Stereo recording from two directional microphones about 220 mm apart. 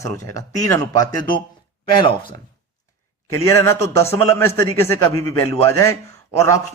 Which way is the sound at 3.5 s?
10° left (ahead or behind).